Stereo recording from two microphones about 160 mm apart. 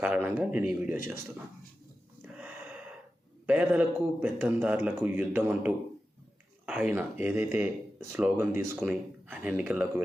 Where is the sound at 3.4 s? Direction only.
10° right (ahead or behind).